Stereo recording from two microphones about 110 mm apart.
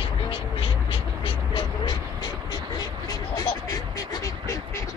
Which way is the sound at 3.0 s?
35° left (ahead or behind).